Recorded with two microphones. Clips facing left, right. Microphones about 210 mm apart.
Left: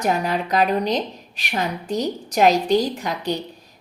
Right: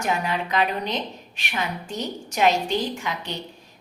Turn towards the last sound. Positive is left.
turn(degrees=40)  # may be behind; listen again after turning